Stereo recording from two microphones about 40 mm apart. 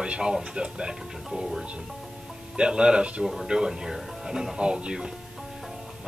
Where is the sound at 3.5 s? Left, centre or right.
Centre.